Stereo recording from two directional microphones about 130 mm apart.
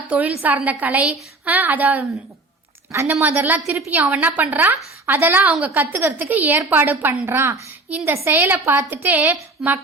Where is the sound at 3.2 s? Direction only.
15° right (ahead or behind).